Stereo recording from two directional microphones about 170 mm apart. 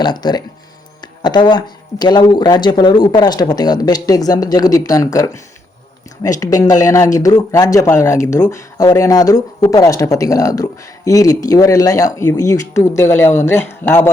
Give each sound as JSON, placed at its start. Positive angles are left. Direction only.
{"t": 0.0, "sound": "speech", "side_deg": 25}
{"t": 6.4, "sound": "speech", "side_deg": 20}